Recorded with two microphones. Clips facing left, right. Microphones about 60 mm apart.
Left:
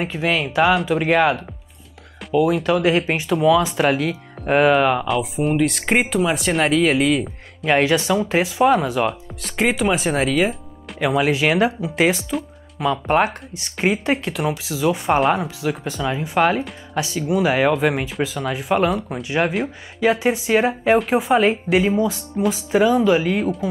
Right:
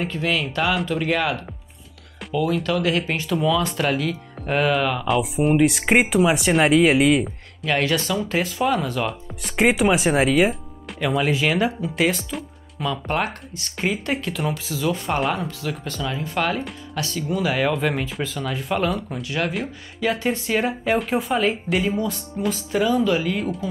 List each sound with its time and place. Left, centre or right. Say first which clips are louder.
0.0 s speech: left 2 dB; centre
2.6 s speech: left 4 dB; left
5.0 s speech: right 1 dB; centre
7.8 s speech: left 4 dB; centre
9.4 s speech: right 2 dB; centre
11.0 s speech: left 3 dB; centre
15.0 s speech: left 6 dB; centre
22.8 s speech: left 4 dB; centre